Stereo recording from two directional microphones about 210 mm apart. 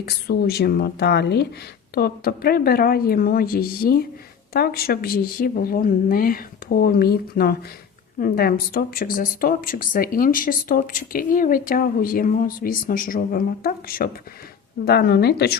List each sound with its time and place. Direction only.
0.0 s speech: 50° left (ahead or behind)